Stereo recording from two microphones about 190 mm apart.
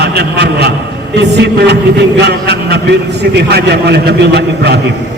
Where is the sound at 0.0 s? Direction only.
60° right (ahead or behind).